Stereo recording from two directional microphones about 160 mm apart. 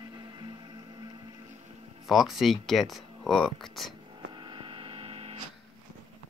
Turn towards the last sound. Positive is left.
turn(degrees=-35)  # may be behind; listen again after turning